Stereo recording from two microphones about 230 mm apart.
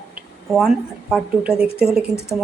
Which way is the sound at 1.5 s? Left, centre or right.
Left.